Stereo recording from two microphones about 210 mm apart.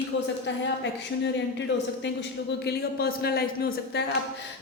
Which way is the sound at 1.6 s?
55° left (ahead or behind).